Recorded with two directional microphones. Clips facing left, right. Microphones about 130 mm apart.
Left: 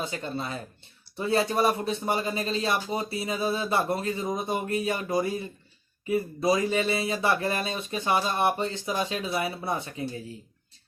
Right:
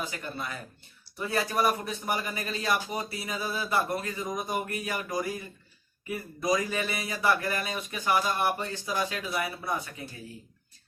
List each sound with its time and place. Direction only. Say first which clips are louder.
0.0 s speech: left 4 dB; 25° left (ahead or behind)